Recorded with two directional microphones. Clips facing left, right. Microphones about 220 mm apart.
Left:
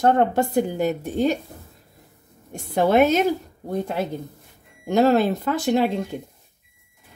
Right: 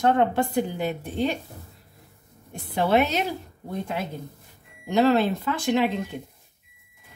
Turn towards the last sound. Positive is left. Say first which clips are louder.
# left 3 dB
turn(degrees=40)  # may be behind; listen again after turning